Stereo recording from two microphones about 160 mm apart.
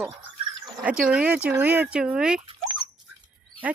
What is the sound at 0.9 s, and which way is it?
Speech, 5° right (ahead or behind).